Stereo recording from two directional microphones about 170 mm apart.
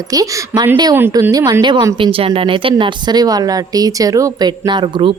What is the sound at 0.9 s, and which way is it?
A woman's voice, 15° right (ahead or behind).